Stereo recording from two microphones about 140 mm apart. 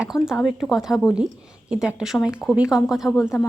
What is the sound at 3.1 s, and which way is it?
Speech, 20° left (ahead or behind).